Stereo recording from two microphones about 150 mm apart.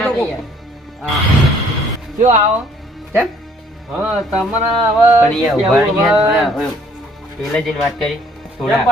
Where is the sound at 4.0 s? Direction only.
5° right (ahead or behind).